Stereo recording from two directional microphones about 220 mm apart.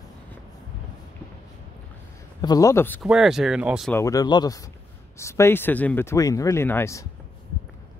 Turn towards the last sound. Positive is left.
turn(degrees=10)  # may be behind; listen again after turning